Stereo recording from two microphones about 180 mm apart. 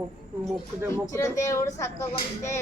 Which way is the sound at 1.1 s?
15° left (ahead or behind).